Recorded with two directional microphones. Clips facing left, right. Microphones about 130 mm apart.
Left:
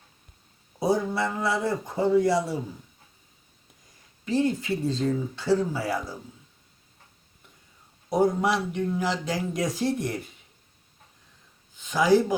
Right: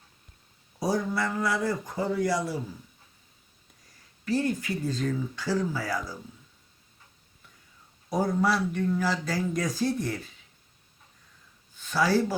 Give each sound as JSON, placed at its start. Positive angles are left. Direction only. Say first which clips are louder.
{"t": 0.8, "sound": "speech", "louder": "left 3 dB", "side_deg": 25}
{"t": 4.3, "sound": "speech", "louder": "left 3 dB", "side_deg": 20}
{"t": 8.1, "sound": "speech", "louder": "left 3 dB", "side_deg": 20}
{"t": 11.8, "sound": "speech", "louder": "left 4 dB", "side_deg": 20}